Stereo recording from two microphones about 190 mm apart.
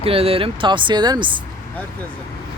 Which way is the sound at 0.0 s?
30° right (ahead or behind).